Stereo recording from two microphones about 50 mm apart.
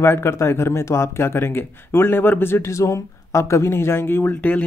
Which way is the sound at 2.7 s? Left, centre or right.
Left.